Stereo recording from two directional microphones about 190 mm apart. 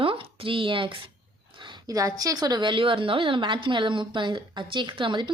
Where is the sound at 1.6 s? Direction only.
20° right (ahead or behind).